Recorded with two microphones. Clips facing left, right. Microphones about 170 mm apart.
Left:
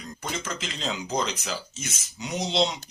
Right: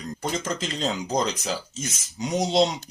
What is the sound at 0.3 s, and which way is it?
Speech, 40° right (ahead or behind).